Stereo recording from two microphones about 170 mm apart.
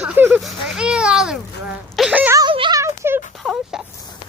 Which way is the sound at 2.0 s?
5° right (ahead or behind).